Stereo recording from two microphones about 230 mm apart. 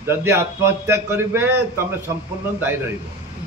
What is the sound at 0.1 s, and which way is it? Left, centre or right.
A man's voice, centre.